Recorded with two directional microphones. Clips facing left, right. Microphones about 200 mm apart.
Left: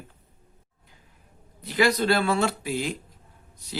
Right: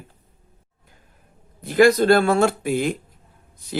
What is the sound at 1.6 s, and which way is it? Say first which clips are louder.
Speech: right 8 dB; 50° right (ahead or behind).